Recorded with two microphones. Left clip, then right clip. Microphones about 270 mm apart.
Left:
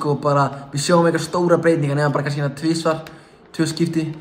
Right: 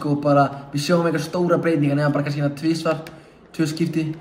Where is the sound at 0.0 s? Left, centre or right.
Left.